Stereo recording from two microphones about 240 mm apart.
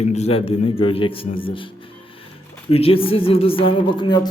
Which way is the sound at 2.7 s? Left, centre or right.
Left.